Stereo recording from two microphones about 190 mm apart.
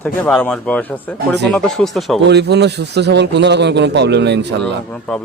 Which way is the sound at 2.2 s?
65° right (ahead or behind).